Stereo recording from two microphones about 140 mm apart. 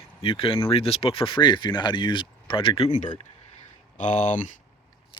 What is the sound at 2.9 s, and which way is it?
Speech, 60° left (ahead or behind).